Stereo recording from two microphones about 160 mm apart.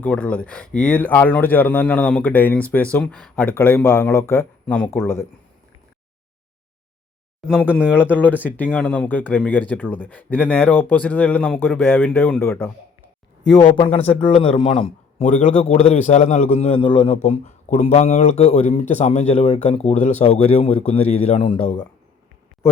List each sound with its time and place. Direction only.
0.0 s speech: 10° left (ahead or behind)
7.4 s speech: 5° right (ahead or behind)
8.1 s speech: 10° left (ahead or behind)
13.7 s a man's voice: 35° left (ahead or behind)
15.2 s a man's voice: 45° left (ahead or behind); by 21.8 s 30° left (ahead or behind)